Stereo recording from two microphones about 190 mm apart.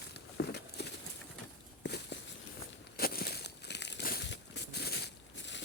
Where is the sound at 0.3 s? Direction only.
60° left (ahead or behind).